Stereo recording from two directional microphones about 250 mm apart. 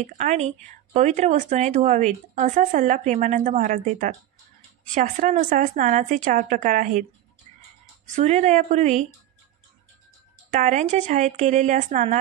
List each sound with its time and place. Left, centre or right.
0.0 s speech: right
8.1 s speech: right
10.5 s speech: right